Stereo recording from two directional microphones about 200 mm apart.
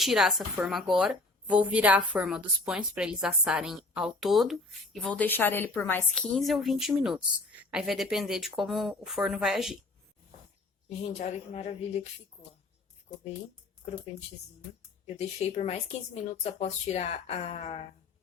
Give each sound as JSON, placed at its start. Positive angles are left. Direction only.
{"t": 0.0, "sound": "a woman's voice", "side_deg": 0}
{"t": 11.0, "sound": "speech", "side_deg": 35}
{"t": 13.8, "sound": "speech", "side_deg": 35}
{"t": 15.0, "sound": "speech", "side_deg": 30}